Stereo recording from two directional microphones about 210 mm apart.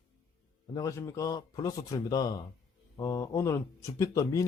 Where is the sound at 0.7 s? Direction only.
15° left (ahead or behind).